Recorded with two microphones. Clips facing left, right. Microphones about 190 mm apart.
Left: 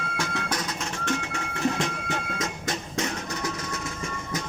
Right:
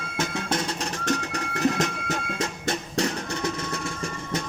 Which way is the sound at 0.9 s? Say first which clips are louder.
Right 1 dB; 40° right (ahead or behind).